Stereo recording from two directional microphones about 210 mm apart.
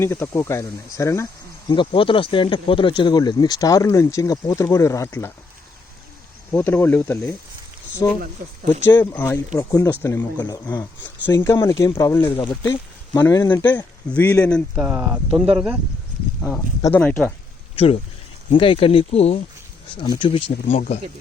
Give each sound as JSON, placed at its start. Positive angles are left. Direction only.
{"t": 0.0, "sound": "speech", "side_deg": 10}
{"t": 6.5, "sound": "speech", "side_deg": 10}
{"t": 14.8, "sound": "speech", "side_deg": -5}
{"t": 16.5, "sound": "speech", "side_deg": 5}
{"t": 18.5, "sound": "speech", "side_deg": 25}
{"t": 20.7, "sound": "speech", "side_deg": 40}